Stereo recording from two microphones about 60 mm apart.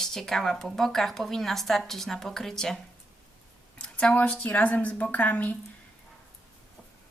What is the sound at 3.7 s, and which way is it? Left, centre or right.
A woman's voice, centre.